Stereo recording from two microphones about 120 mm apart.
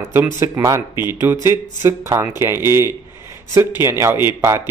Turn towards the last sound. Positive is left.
turn(degrees=-20)  # may be behind; listen again after turning